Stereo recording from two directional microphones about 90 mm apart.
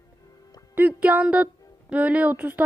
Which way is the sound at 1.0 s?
15° right (ahead or behind).